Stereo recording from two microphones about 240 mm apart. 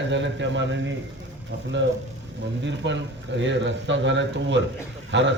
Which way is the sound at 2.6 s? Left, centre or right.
Right.